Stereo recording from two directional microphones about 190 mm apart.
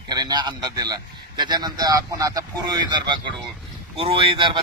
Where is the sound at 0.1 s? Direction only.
20° right (ahead or behind).